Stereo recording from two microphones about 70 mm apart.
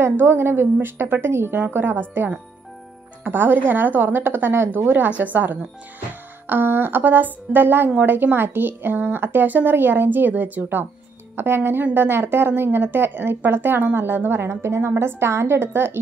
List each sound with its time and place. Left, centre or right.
0.0 s a woman's voice: right